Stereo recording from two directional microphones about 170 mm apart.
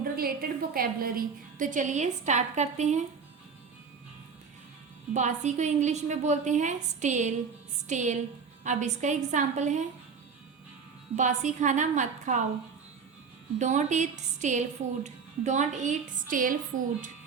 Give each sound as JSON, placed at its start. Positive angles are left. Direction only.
{"t": 0.0, "sound": "a woman's voice", "side_deg": -60}
{"t": 5.1, "sound": "a woman's voice", "side_deg": -45}
{"t": 11.2, "sound": "a woman's voice", "side_deg": -45}
{"t": 13.6, "sound": "a woman's voice", "side_deg": -45}